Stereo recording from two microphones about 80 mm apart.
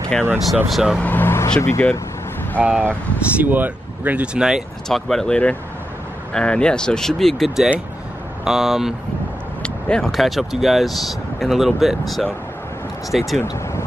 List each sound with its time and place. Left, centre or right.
0.7 s speech: centre
1.0 s vehicle: left
1.6 s speech: left
2.6 s speech: right
4.8 s speech: centre
9.6 s vehicle: centre
10.1 s speech: centre